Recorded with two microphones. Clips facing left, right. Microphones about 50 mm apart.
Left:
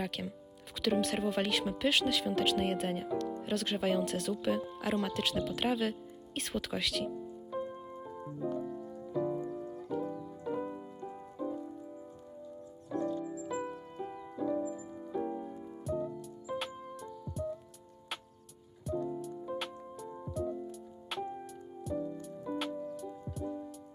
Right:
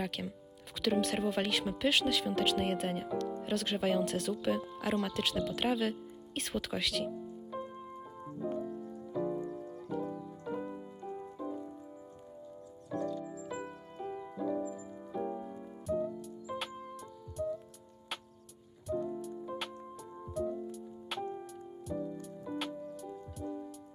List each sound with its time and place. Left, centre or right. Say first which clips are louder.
0.0 s speech: even; centre
8.4 s keyboard: left 1 dB; centre
9.0 s music: left 2 dB; centre
9.4 s keyboard: left 1 dB; left
9.9 s keyboard: left 1 dB; centre
10.2 s music: left 2 dB; centre
13.0 s music: left 2 dB; left
13.2 s music: left 4 dB; centre
19.0 s music: left 1 dB; centre